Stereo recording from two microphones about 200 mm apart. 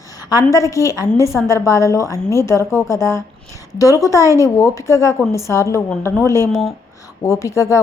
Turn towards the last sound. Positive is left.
turn(degrees=15)  # may be behind; listen again after turning